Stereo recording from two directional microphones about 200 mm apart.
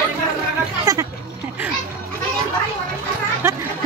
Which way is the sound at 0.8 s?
15° right (ahead or behind).